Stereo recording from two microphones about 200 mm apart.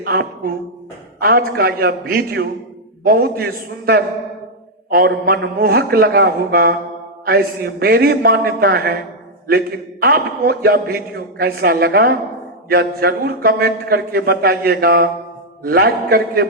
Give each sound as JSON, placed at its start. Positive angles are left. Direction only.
{"t": 0.0, "sound": "a man's voice", "side_deg": -50}
{"t": 10.0, "sound": "a man's voice", "side_deg": -50}